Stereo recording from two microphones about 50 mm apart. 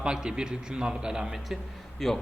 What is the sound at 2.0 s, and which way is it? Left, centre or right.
Speech, centre.